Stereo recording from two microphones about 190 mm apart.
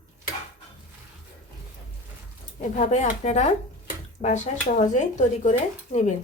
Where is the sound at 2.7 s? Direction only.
40° left (ahead or behind).